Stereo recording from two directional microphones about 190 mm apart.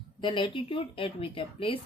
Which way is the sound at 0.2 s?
25° left (ahead or behind).